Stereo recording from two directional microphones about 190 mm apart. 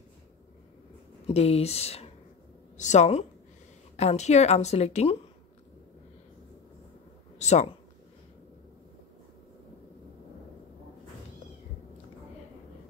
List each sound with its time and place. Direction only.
1.2 s a woman's voice: 30° left (ahead or behind)
7.3 s speech: 35° left (ahead or behind)